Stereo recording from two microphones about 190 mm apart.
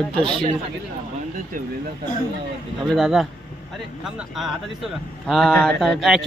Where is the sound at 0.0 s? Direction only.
5° left (ahead or behind).